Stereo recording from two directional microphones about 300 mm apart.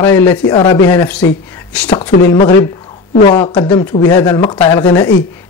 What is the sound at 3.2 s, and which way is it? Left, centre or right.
Speech, centre.